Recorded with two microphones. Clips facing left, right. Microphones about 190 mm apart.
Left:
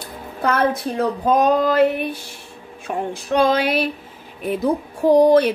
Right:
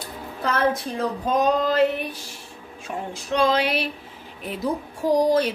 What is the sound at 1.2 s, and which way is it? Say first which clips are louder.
Speech: left 4 dB; 55° left (ahead or behind).